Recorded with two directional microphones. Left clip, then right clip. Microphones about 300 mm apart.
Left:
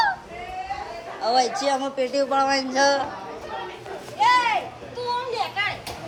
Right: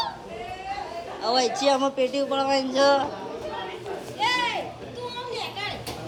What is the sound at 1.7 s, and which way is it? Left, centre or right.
Speech, centre.